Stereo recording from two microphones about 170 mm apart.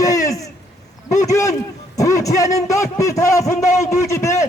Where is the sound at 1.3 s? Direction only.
20° left (ahead or behind).